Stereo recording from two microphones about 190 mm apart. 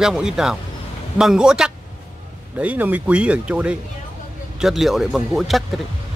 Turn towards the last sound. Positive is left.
turn(degrees=0)  # may be behind; listen again after turning